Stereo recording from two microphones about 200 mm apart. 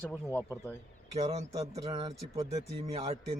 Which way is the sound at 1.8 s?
25° right (ahead or behind).